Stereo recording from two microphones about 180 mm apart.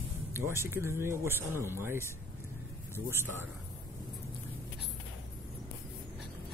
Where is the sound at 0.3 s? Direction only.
15° right (ahead or behind).